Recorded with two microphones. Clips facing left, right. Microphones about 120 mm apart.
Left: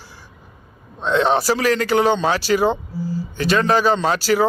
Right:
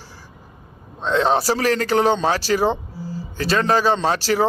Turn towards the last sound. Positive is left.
turn(degrees=-35)  # may be behind; listen again after turning